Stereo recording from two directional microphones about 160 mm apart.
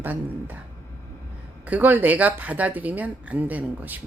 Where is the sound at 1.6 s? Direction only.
10° right (ahead or behind).